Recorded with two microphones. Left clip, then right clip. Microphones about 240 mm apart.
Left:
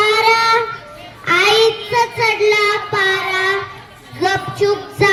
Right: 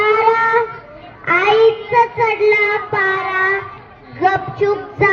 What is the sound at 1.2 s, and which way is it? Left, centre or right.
Child singing, left.